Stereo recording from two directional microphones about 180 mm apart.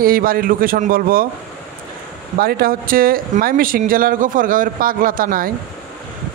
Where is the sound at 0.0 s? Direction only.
55° right (ahead or behind).